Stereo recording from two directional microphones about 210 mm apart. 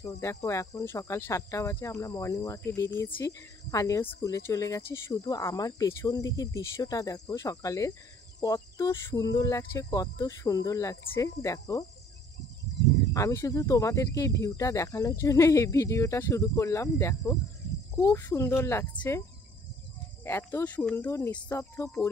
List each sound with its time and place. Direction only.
0.0 s speech: 15° left (ahead or behind)
13.1 s speech: 15° left (ahead or behind)
20.2 s speech: 10° left (ahead or behind)